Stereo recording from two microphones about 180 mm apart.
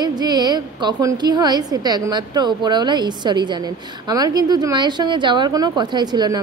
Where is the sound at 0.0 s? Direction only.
20° right (ahead or behind).